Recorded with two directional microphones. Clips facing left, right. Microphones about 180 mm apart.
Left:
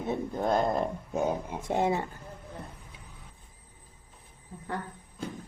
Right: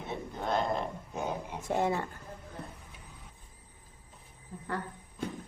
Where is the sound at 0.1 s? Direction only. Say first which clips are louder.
Left 5 dB; 45° left (ahead or behind).